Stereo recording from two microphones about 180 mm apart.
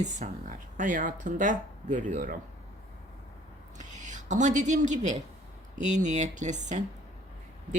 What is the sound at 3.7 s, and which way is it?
Speech, 45° right (ahead or behind).